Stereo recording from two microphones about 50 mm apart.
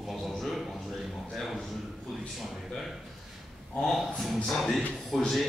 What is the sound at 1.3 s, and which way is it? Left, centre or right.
Speech, centre.